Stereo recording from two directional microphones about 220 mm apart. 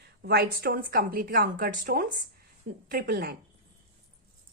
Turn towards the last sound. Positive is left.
turn(degrees=-45)  # may be behind; listen again after turning